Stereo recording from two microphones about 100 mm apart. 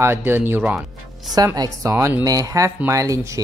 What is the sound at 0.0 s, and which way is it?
Speech, 20° right (ahead or behind).